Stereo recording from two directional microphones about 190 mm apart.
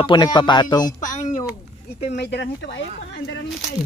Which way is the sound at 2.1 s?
65° left (ahead or behind).